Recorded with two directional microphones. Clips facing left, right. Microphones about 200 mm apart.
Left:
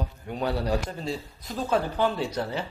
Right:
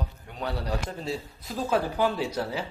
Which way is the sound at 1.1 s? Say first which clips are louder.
Even; 5° right (ahead or behind).